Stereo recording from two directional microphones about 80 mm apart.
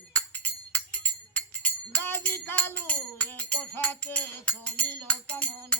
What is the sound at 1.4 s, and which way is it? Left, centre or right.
Music, centre.